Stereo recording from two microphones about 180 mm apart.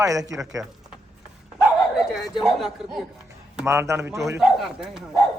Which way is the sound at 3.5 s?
15° right (ahead or behind).